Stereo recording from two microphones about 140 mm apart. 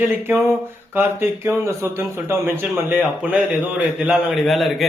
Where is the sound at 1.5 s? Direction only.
20° right (ahead or behind).